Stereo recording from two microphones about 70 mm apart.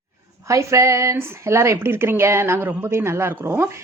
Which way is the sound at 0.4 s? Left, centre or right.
Right.